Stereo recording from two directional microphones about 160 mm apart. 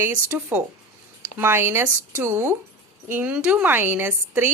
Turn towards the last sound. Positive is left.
turn(degrees=-15)  # may be behind; listen again after turning